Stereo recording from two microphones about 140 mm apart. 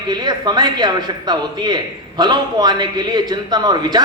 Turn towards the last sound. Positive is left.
turn(degrees=-30)  # may be behind; listen again after turning